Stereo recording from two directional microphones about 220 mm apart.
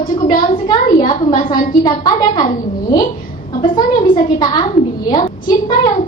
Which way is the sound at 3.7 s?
20° left (ahead or behind).